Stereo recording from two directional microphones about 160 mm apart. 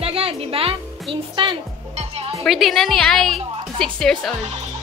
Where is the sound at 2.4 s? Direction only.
Centre (ahead or behind).